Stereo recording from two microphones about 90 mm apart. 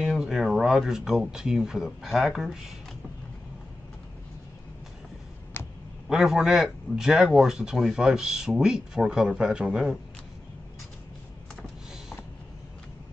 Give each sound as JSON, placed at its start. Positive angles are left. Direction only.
{"t": 0.0, "sound": "speech", "side_deg": -5}
{"t": 5.5, "sound": "a sound", "side_deg": 25}
{"t": 6.0, "sound": "a man's voice", "side_deg": -5}